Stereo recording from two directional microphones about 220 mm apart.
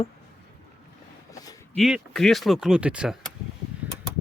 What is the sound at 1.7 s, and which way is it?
Speech, centre (ahead or behind).